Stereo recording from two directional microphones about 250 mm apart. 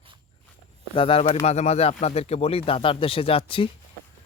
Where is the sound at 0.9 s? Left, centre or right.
Left.